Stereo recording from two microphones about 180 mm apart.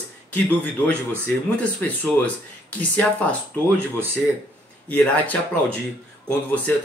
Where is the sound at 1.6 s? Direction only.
5° left (ahead or behind).